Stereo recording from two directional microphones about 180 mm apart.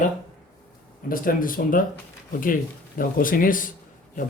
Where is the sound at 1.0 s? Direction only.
50° left (ahead or behind).